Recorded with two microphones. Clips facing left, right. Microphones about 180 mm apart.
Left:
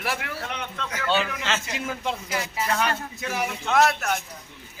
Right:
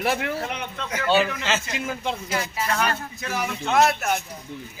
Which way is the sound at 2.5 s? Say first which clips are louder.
Left 1 dB; 15° left (ahead or behind).